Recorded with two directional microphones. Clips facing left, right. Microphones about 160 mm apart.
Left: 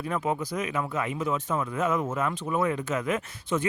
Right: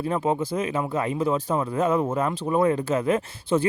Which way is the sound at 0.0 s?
30° right (ahead or behind).